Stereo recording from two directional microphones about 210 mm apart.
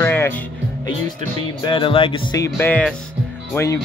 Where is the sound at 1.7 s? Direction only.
25° left (ahead or behind).